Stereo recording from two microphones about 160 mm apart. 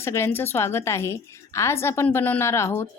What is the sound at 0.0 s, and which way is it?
A woman's voice, 15° left (ahead or behind).